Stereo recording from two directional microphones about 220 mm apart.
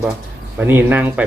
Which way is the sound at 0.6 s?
10° right (ahead or behind).